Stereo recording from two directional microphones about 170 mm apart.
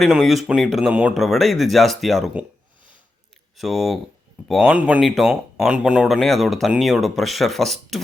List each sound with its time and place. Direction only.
0.0 s speech: centre (ahead or behind)
3.6 s speech: centre (ahead or behind)